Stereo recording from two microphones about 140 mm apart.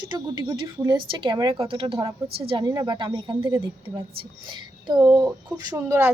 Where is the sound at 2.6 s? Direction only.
30° right (ahead or behind).